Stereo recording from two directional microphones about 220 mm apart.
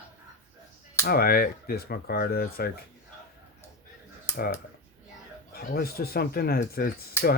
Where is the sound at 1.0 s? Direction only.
45° left (ahead or behind).